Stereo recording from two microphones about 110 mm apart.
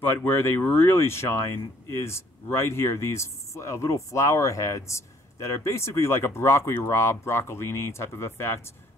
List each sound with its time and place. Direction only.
0.0 s speech: 20° left (ahead or behind)